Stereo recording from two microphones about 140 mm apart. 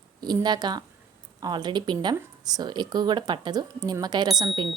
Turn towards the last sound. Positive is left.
turn(degrees=-35)  # may be behind; listen again after turning